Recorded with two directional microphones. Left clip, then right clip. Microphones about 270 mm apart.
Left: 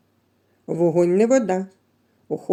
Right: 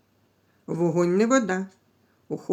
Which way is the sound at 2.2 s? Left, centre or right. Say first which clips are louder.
Left 5 dB; centre.